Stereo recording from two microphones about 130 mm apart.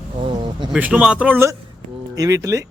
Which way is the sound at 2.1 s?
25° right (ahead or behind).